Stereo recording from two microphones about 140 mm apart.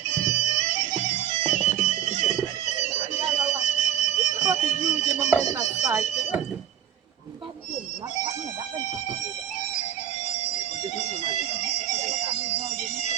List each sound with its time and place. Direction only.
0.1 s bagpipes: 55° left (ahead or behind)
2.6 s alarm: 55° left (ahead or behind)
3.6 s music: 55° left (ahead or behind)
4.6 s a sound: 55° left (ahead or behind)
5.8 s a sound: 20° right (ahead or behind)
11.9 s bagpipes: 60° left (ahead or behind)